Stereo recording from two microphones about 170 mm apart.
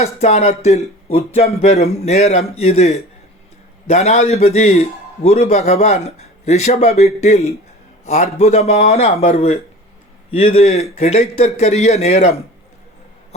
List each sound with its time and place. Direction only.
0.0 s a man's voice: 40° left (ahead or behind)